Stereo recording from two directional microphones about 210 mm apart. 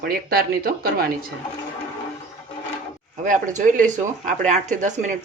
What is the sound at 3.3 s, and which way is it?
Speech, 40° right (ahead or behind).